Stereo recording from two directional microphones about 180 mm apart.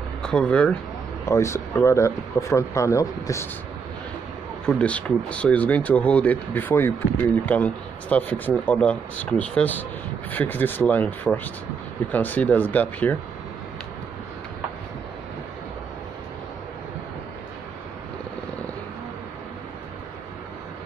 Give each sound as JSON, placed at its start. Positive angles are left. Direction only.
{"t": 0.2, "sound": "speech", "side_deg": 5}
{"t": 4.6, "sound": "speech", "side_deg": 5}